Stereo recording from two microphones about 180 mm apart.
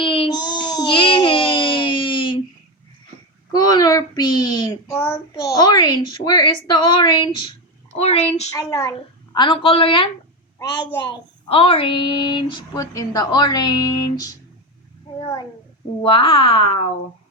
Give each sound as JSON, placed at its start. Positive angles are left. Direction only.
{"t": 0.0, "sound": "baby cry", "side_deg": 30}
{"t": 3.5, "sound": "a sound", "side_deg": 20}
{"t": 6.1, "sound": "a woman's voice", "side_deg": 25}
{"t": 8.5, "sound": "speech", "side_deg": 15}
{"t": 11.4, "sound": "speech", "side_deg": 30}
{"t": 16.0, "sound": "speech", "side_deg": 30}